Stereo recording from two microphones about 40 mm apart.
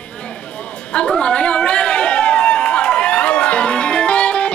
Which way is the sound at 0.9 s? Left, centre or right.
Left.